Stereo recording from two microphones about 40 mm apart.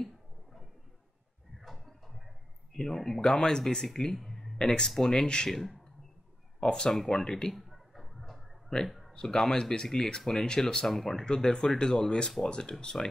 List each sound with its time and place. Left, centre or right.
2.7 s speech: centre
5.5 s speech: centre
6.6 s speech: centre
7.0 s speech: centre
7.5 s a sound: centre
9.2 s speech: centre
10.9 s speech: centre
11.2 s speech: centre